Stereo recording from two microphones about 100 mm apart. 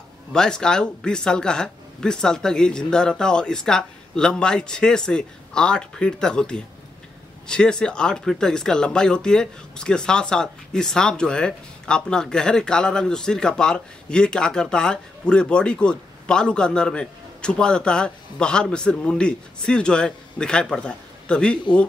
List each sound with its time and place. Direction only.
0.3 s speech: 5° left (ahead or behind)